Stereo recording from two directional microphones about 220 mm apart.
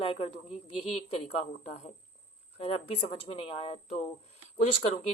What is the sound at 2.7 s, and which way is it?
Speech, 25° left (ahead or behind).